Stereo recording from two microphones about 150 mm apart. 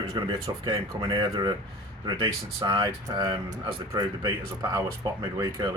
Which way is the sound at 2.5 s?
25° right (ahead or behind).